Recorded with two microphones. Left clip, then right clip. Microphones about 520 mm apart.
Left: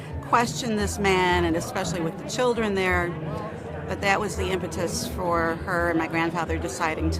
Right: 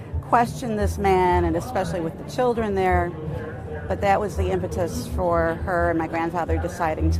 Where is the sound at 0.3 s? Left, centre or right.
Right.